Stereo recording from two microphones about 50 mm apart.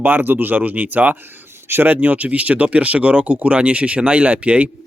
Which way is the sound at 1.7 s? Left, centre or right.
Right.